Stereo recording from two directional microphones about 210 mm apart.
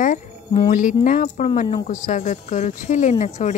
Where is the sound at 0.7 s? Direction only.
40° left (ahead or behind).